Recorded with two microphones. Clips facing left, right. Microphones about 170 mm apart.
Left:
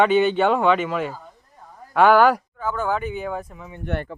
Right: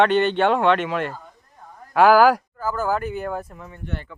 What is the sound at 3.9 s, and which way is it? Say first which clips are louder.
Speech: left 6 dB; 65° left (ahead or behind).